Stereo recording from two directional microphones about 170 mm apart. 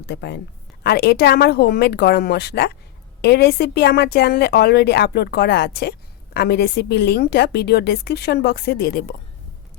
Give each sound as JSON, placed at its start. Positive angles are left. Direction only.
{"t": 0.0, "sound": "a woman's voice", "side_deg": 80}
{"t": 0.9, "sound": "a woman's voice", "side_deg": 65}